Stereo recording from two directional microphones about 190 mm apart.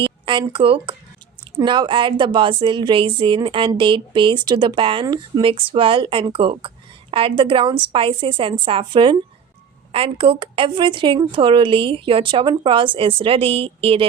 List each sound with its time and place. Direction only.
0.3 s a woman's voice: 25° right (ahead or behind)